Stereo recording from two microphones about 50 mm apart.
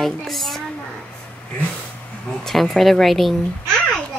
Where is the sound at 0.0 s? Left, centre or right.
Centre.